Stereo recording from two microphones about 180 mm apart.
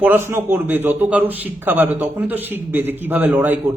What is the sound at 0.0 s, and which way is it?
A man's voice, 10° right (ahead or behind).